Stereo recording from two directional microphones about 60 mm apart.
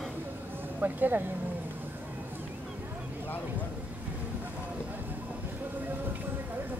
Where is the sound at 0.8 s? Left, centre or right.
Right.